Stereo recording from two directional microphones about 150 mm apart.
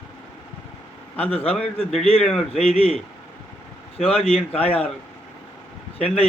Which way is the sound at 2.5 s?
40° left (ahead or behind).